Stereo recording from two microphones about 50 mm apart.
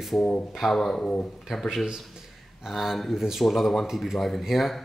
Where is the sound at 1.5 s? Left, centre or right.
Centre.